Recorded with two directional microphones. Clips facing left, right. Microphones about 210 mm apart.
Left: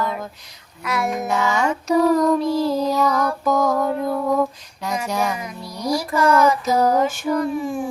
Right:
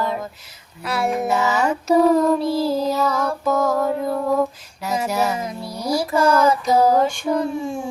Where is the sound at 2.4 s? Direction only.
30° right (ahead or behind).